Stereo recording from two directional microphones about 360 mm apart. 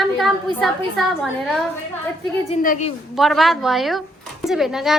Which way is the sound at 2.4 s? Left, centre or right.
Centre.